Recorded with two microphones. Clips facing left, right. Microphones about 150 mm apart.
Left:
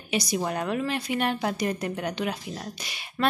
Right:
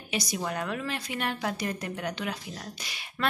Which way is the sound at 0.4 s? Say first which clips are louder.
Left 4 dB; 30° left (ahead or behind).